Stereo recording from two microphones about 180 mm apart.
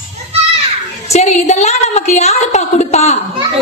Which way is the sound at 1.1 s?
40° left (ahead or behind).